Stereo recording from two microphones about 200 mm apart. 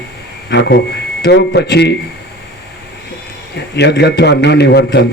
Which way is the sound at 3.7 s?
60° left (ahead or behind).